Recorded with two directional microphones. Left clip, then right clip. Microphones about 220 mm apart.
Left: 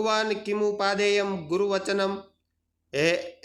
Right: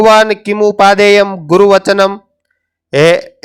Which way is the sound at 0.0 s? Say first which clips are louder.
Right 19 dB; 45° right (ahead or behind).